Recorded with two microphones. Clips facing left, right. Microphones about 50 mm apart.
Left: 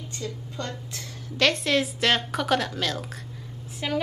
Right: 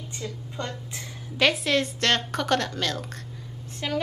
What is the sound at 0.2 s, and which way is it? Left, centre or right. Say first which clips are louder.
A woman's voice: even; centre.